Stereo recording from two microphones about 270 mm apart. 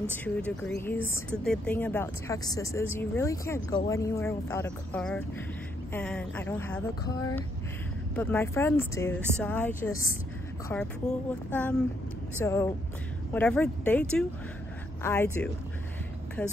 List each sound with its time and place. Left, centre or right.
0.2 s speech: centre
8.2 s speech: centre